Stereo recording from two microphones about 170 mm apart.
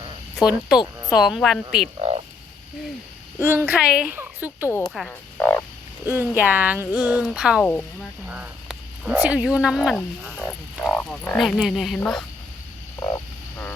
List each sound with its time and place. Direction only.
0.3 s speech: 5° right (ahead or behind)
2.0 s frog: 35° right (ahead or behind)
3.4 s speech: 15° right (ahead or behind)
4.9 s frog: 5° left (ahead or behind)
6.1 s speech: 10° right (ahead or behind)